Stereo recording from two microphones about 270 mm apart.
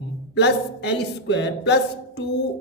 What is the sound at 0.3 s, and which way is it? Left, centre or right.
Speech, left.